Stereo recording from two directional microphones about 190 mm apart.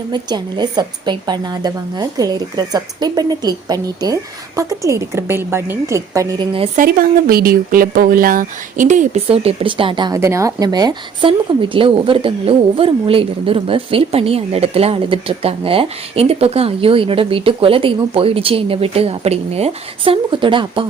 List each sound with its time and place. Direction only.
0.1 s speech: 20° right (ahead or behind)
6.7 s speech: 50° right (ahead or behind); by 20.8 s 25° right (ahead or behind)